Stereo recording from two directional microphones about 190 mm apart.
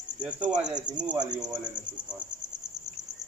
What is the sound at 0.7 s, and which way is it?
Speech, 20° right (ahead or behind).